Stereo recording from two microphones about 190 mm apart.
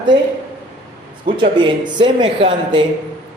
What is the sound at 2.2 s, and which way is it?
Speech, 25° right (ahead or behind).